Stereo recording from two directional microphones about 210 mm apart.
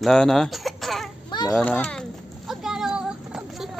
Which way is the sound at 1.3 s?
20° left (ahead or behind).